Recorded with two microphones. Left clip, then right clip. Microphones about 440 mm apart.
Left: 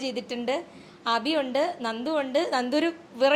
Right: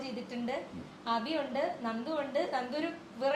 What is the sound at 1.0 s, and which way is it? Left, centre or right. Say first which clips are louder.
A woman's voice: left 8 dB; left.